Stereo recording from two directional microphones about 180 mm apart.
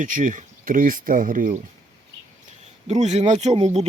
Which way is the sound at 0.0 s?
45° right (ahead or behind).